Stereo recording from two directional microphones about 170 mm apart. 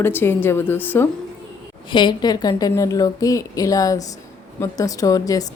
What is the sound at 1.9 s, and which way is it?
A woman's voice, 25° left (ahead or behind).